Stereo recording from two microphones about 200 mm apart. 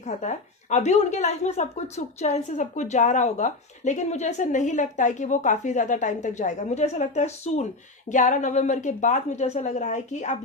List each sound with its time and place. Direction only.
0.0 s a woman's voice: 35° left (ahead or behind)